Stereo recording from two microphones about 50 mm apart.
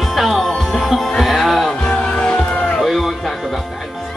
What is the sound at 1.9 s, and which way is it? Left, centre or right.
Music, left.